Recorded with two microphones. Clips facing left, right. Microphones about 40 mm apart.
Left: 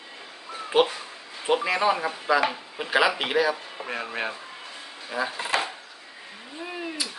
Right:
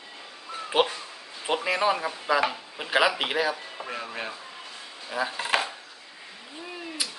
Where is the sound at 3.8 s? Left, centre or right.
Centre.